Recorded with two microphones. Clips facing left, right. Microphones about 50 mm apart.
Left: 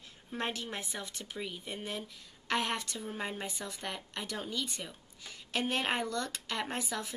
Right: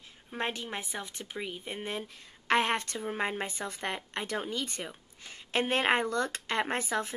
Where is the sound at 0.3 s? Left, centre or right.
Centre.